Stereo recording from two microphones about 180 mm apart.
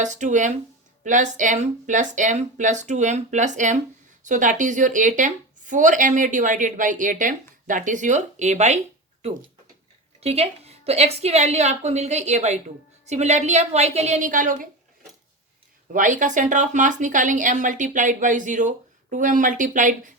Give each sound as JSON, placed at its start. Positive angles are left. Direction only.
{"t": 0.0, "sound": "speech", "side_deg": -40}
{"t": 10.2, "sound": "a woman's voice", "side_deg": -35}
{"t": 15.9, "sound": "speech", "side_deg": -45}